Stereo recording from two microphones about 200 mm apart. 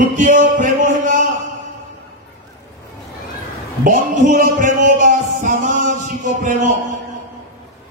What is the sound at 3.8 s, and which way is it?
Music, 40° right (ahead or behind).